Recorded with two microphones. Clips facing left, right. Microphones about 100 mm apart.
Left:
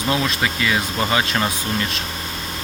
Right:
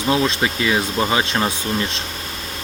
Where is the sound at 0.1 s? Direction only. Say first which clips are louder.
Right 3 dB; 25° right (ahead or behind).